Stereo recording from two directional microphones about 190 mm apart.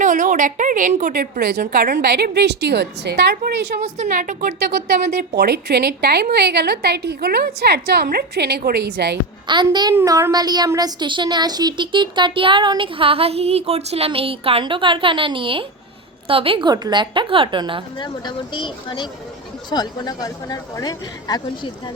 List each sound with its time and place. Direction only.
0.0 s a woman's voice: 40° right (ahead or behind); by 3.5 s 60° right (ahead or behind)
3.8 s speech: 35° right (ahead or behind)
5.3 s a woman's voice: 60° right (ahead or behind)
9.5 s a child's voice: 25° right (ahead or behind)
18.0 s speech: 25° left (ahead or behind)